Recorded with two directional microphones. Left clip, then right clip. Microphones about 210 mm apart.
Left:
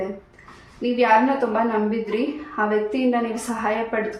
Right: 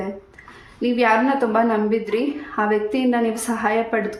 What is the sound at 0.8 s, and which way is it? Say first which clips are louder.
Speech: right 2 dB; 40° right (ahead or behind).